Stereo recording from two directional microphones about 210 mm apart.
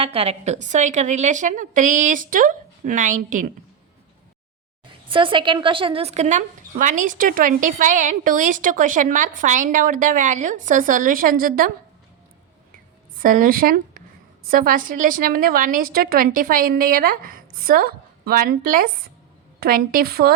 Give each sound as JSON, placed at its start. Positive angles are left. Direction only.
{"t": 0.0, "sound": "a woman's voice", "side_deg": -30}
{"t": 5.0, "sound": "a woman's voice", "side_deg": -25}
{"t": 13.2, "sound": "a woman's voice", "side_deg": -40}